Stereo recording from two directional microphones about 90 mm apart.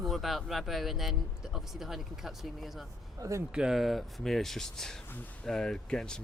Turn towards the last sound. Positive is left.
turn(degrees=5)  # may be behind; listen again after turning